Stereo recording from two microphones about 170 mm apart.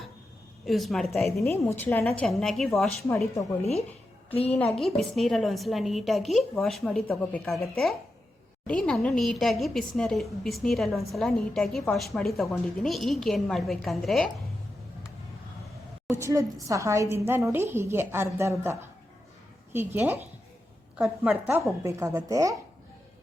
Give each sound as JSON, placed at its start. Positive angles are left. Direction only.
{"t": 0.6, "sound": "a woman's voice", "side_deg": 0}
{"t": 1.5, "sound": "a woman's voice", "side_deg": 15}
{"t": 2.1, "sound": "a woman's voice", "side_deg": 0}
{"t": 3.6, "sound": "speech", "side_deg": 40}
{"t": 4.5, "sound": "a woman's voice", "side_deg": 5}
{"t": 16.0, "sound": "a woman's voice", "side_deg": -15}